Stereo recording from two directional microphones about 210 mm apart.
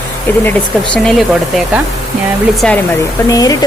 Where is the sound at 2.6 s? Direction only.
5° left (ahead or behind).